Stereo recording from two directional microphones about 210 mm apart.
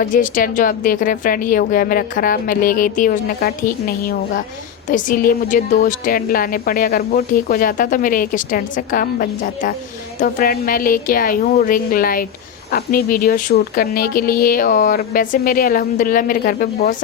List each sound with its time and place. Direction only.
0.0 s a woman's voice: 40° left (ahead or behind)